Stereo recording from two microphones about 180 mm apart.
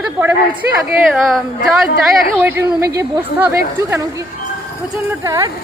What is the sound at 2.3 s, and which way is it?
A woman's voice, 10° right (ahead or behind).